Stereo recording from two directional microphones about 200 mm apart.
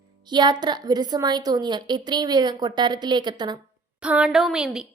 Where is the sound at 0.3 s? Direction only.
20° right (ahead or behind).